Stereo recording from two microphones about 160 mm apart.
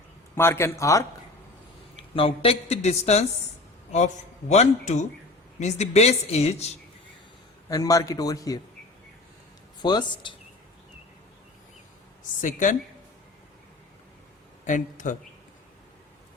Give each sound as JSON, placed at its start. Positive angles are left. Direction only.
{"t": 0.3, "sound": "speech", "side_deg": 15}
{"t": 2.0, "sound": "a man's voice", "side_deg": 35}
{"t": 7.7, "sound": "a man's voice", "side_deg": 20}
{"t": 9.8, "sound": "a man's voice", "side_deg": 25}
{"t": 12.4, "sound": "a man's voice", "side_deg": 50}
{"t": 14.6, "sound": "a man's voice", "side_deg": 50}